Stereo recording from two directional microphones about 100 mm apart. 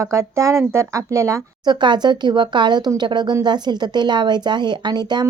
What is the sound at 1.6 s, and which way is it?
Speech, 50° right (ahead or behind).